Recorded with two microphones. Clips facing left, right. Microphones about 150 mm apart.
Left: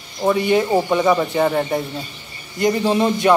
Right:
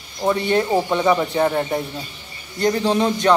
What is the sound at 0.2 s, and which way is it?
A man's voice, 5° left (ahead or behind).